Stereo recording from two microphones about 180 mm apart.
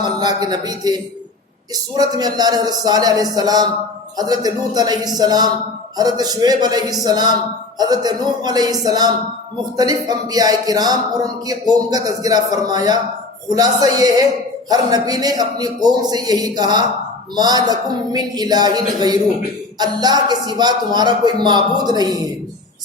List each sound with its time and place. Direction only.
0.2 s speech: 20° right (ahead or behind)